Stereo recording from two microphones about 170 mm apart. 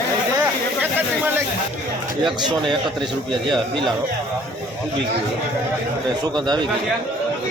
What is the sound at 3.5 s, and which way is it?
Speech, centre (ahead or behind).